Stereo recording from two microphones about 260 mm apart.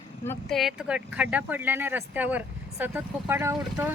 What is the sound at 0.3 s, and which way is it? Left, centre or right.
Speech, centre.